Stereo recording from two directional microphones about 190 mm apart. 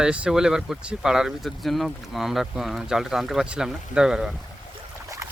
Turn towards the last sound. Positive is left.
turn(degrees=-15)  # may be behind; listen again after turning